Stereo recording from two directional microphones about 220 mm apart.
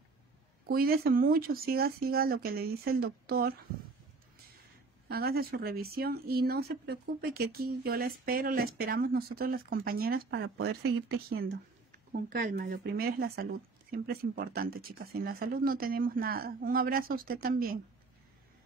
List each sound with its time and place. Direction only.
0.7 s speech: 45° right (ahead or behind)
5.0 s speech: 45° right (ahead or behind)